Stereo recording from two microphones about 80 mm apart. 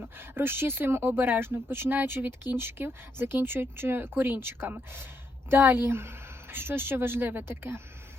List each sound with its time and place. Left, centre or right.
0.0 s speech: right